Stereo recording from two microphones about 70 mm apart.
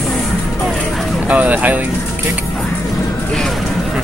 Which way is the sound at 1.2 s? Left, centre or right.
Centre.